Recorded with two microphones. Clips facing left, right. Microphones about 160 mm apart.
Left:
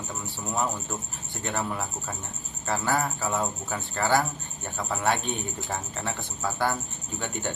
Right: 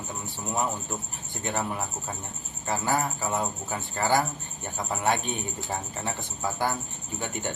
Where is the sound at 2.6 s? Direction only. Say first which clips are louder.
Even; 15° right (ahead or behind).